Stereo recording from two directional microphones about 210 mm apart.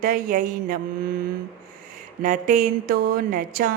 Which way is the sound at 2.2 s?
40° right (ahead or behind).